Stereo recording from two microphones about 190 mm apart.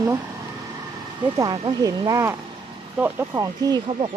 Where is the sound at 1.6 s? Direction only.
20° right (ahead or behind).